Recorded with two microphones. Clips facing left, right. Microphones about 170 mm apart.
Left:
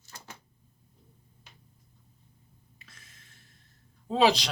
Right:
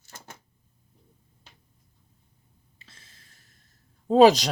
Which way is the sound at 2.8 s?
30° right (ahead or behind).